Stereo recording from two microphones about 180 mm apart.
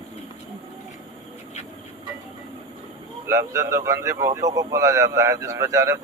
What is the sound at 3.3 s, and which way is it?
A man's voice, 20° right (ahead or behind).